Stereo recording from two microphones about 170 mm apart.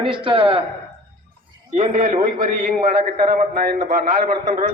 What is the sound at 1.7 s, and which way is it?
A man's voice, 45° right (ahead or behind).